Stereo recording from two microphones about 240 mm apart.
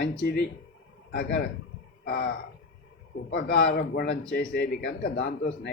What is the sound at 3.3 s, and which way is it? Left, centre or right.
A man's voice, left.